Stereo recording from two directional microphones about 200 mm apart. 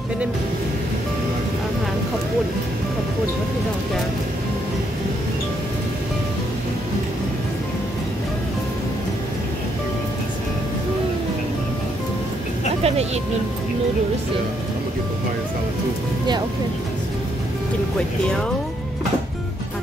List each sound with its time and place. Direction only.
12.8 s speech: 30° right (ahead or behind)